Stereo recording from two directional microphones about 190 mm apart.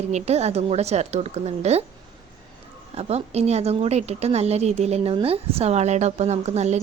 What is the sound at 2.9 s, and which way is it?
A woman's voice, 35° right (ahead or behind).